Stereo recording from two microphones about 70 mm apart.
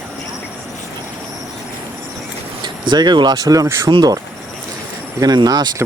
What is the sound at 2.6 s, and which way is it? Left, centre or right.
Speech, right.